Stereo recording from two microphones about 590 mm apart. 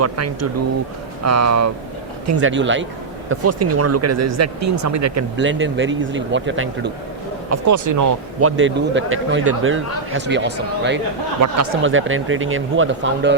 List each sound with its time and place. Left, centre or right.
0.0 s speech: right
7.5 s speech: right